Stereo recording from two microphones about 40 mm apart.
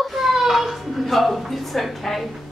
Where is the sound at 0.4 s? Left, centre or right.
Centre.